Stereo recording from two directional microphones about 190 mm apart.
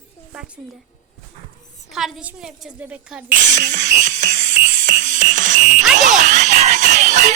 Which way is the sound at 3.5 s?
40° right (ahead or behind).